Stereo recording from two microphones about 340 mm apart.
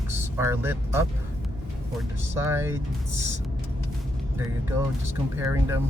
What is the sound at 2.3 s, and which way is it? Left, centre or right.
Speech, centre.